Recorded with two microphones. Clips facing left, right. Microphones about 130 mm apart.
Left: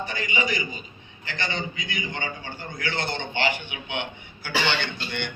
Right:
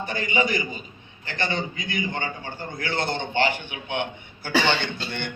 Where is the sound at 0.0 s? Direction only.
50° right (ahead or behind).